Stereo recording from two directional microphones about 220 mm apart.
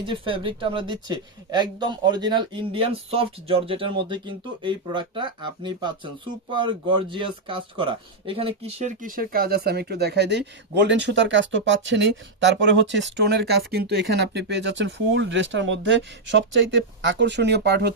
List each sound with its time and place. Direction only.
0.0 s speech: 25° right (ahead or behind); by 17.9 s 50° right (ahead or behind)